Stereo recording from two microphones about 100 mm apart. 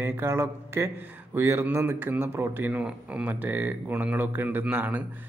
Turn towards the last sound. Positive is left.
turn(degrees=-15)  # may be behind; listen again after turning